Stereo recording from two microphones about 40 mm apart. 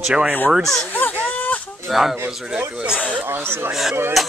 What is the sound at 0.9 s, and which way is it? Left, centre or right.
Speech, left.